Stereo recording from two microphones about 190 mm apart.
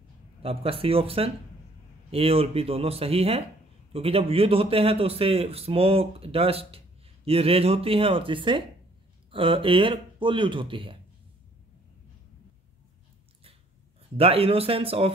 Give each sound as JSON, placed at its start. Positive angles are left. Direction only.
{"t": 0.4, "sound": "a man's voice", "side_deg": -30}
{"t": 14.1, "sound": "a man's voice", "side_deg": -30}